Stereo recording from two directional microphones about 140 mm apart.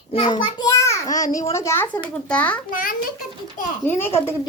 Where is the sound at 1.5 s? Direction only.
20° left (ahead or behind).